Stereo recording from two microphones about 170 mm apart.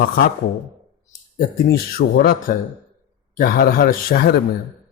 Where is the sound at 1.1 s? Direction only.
55° left (ahead or behind).